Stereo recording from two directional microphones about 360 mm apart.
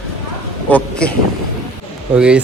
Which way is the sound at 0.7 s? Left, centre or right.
Centre.